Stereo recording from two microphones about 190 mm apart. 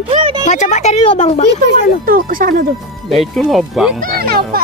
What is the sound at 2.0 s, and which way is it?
Speech, 50° right (ahead or behind).